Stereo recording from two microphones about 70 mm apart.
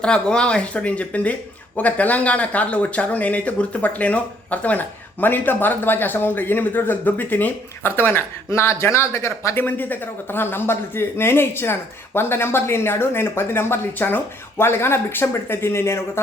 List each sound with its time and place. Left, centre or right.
0.0 s speech: centre; by 9.6 s left
9.6 s speech: left